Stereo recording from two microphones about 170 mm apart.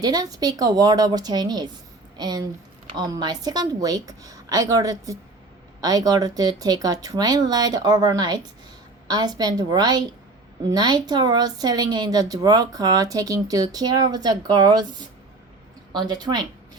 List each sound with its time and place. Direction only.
0.0 s a woman's voice: 20° right (ahead or behind)
15.9 s speech: 25° right (ahead or behind)